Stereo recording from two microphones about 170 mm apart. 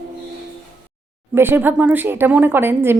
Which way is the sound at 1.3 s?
15° right (ahead or behind).